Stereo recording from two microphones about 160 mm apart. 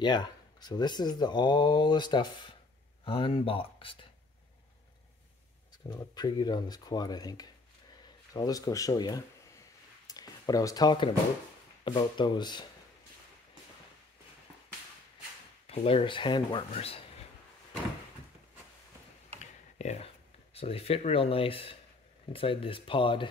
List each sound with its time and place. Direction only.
0.0 s speech: 25° left (ahead or behind)
5.9 s speech: 25° left (ahead or behind)
15.6 s speech: 40° left (ahead or behind)
19.8 s speech: 45° left (ahead or behind)